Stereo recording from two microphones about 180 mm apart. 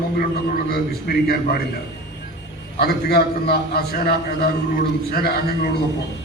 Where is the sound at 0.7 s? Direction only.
60° left (ahead or behind).